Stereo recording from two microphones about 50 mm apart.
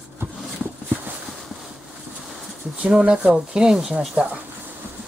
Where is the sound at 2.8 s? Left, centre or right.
Centre.